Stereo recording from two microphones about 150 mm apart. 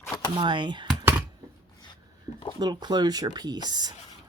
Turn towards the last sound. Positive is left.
turn(degrees=-25)  # may be behind; listen again after turning